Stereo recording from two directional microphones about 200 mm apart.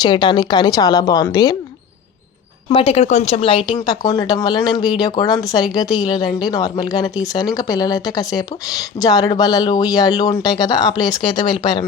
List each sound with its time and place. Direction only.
0.0 s speech: 25° left (ahead or behind)
2.6 s speech: 30° left (ahead or behind)
3.8 s speech: 15° left (ahead or behind)